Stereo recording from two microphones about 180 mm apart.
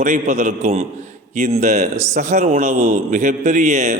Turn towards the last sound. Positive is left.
turn(degrees=-40)  # may be behind; listen again after turning